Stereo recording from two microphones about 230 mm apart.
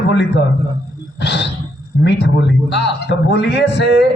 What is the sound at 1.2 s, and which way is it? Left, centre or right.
A man's voice, left.